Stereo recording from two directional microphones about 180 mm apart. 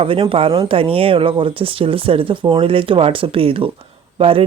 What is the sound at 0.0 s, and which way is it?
Speech, 30° right (ahead or behind).